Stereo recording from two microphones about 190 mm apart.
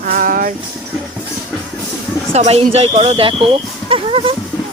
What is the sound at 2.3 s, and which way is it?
Speech, 35° right (ahead or behind).